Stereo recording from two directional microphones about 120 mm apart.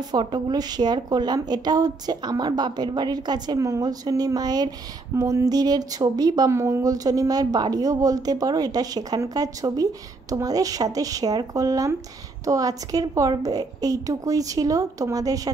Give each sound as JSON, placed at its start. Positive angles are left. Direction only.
{"t": 0.1, "sound": "a woman's voice", "side_deg": -35}